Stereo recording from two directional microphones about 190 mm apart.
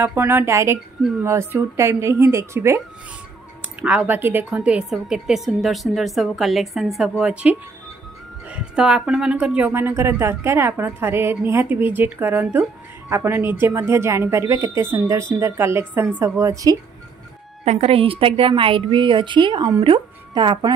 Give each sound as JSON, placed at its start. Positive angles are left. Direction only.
{"t": 0.0, "sound": "speech", "side_deg": -10}
{"t": 3.8, "sound": "a woman's voice", "side_deg": -5}
{"t": 17.6, "sound": "a woman's voice", "side_deg": -35}